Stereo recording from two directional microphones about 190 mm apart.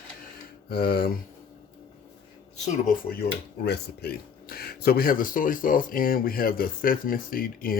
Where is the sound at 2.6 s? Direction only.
50° left (ahead or behind).